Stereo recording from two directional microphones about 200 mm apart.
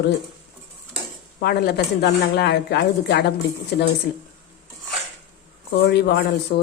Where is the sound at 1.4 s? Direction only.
55° left (ahead or behind).